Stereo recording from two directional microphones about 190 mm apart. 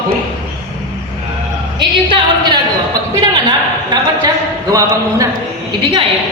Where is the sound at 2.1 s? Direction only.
25° right (ahead or behind).